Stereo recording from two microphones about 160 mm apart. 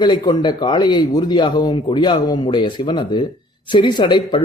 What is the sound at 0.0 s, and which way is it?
Speech, 25° left (ahead or behind).